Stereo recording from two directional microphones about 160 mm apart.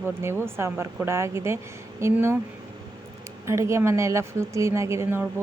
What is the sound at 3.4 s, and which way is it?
A woman's voice, 15° right (ahead or behind).